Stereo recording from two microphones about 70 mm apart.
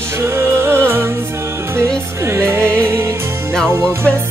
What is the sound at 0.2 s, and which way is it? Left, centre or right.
Music, right.